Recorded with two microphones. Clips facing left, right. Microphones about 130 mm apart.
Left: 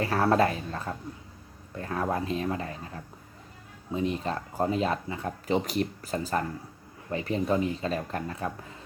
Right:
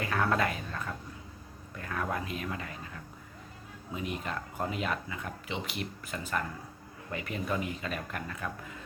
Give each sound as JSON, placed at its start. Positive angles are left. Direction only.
{"t": 0.0, "sound": "speech", "side_deg": 30}